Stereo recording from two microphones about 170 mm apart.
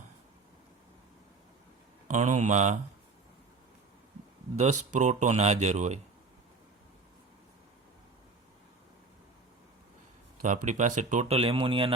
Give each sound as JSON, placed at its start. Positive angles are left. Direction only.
{"t": 2.0, "sound": "speech", "side_deg": -45}
{"t": 4.5, "sound": "speech", "side_deg": -40}
{"t": 10.4, "sound": "speech", "side_deg": -45}